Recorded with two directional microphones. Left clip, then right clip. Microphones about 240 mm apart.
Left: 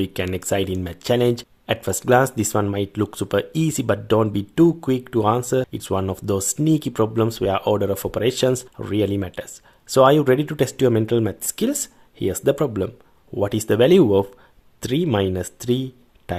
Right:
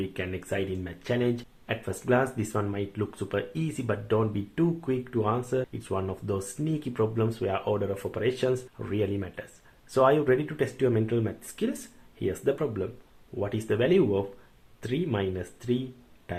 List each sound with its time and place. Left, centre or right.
0.0 s speech: left